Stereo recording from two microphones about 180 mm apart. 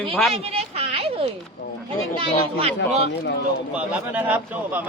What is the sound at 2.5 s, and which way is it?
Speech, 35° right (ahead or behind).